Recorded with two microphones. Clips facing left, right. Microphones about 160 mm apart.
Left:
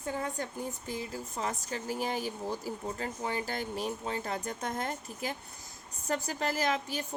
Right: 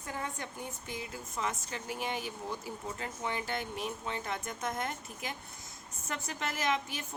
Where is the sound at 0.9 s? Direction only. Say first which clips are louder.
Left 4 dB; 35° left (ahead or behind).